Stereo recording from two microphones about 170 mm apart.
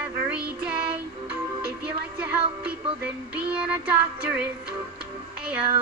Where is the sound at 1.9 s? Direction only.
10° right (ahead or behind).